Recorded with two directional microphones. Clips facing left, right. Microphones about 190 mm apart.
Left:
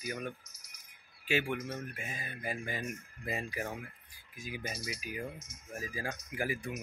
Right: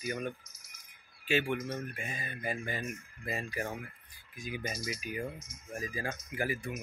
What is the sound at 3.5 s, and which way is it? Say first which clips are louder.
Speech: right 2 dB; centre (ahead or behind).